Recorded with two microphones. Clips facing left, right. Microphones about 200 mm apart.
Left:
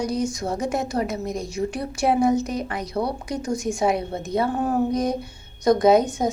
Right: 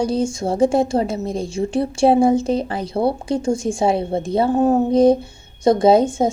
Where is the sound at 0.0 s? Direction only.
30° right (ahead or behind).